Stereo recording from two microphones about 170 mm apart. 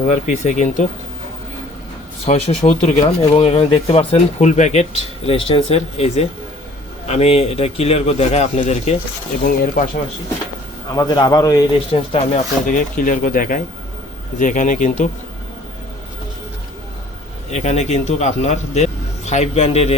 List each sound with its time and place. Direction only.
0.0 s speech: 50° left (ahead or behind)
2.6 s speech: 40° left (ahead or behind)
9.4 s speech: 55° left (ahead or behind)
10.9 s a man's voice: 25° left (ahead or behind)
12.1 s speech: 45° left (ahead or behind)
17.5 s a man's voice: 40° left (ahead or behind)